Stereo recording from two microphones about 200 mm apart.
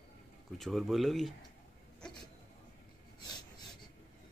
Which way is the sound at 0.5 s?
Centre (ahead or behind).